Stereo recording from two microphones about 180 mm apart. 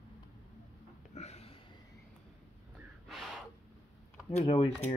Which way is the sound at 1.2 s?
35° left (ahead or behind).